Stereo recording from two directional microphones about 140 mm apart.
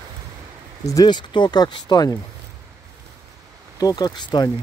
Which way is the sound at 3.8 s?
25° left (ahead or behind).